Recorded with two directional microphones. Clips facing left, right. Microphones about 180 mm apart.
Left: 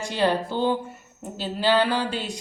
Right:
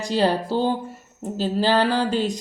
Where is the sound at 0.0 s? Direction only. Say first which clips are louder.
Right 2 dB; 40° right (ahead or behind).